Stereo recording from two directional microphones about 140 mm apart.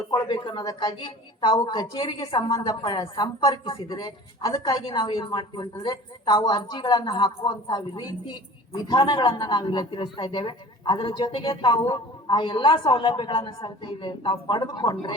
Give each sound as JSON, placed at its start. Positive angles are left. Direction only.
{"t": 0.1, "sound": "a woman's voice", "side_deg": 35}